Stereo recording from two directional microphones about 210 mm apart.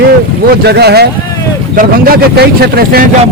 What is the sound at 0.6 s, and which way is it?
Speech, 50° right (ahead or behind).